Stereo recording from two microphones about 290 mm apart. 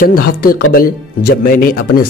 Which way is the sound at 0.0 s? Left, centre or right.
Left.